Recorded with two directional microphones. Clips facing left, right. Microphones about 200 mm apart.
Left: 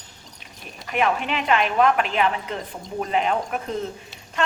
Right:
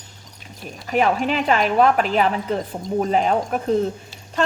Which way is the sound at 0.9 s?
35° right (ahead or behind).